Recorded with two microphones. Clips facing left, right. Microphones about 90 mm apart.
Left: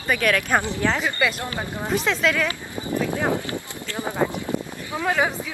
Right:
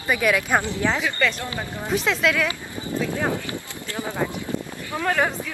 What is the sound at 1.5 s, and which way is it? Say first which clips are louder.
Speech: left 2 dB; 20° left (ahead or behind).